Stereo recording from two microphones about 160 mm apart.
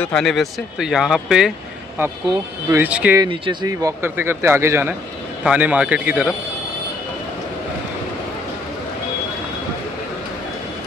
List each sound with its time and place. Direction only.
0.0 s speech: 5° left (ahead or behind)
2.7 s speech: 10° right (ahead or behind)
3.2 s speech: 35° right (ahead or behind)
3.6 s speech: 15° right (ahead or behind)